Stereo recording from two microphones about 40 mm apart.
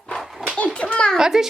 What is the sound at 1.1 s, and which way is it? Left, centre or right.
Speech, centre.